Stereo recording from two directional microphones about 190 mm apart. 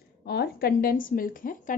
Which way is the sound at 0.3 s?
55° left (ahead or behind).